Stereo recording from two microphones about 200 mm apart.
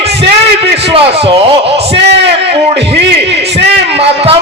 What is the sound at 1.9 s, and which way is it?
Speech, 55° right (ahead or behind).